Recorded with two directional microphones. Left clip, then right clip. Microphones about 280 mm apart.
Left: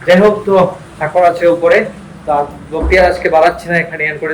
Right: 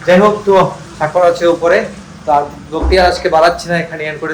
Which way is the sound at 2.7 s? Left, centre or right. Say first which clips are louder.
Left 1 dB; centre.